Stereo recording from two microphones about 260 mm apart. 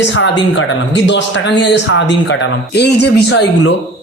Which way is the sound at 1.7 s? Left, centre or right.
Left.